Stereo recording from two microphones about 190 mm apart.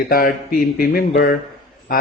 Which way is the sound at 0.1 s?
50° left (ahead or behind).